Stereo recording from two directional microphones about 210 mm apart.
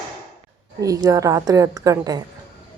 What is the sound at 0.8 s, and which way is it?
A woman's voice, 15° right (ahead or behind).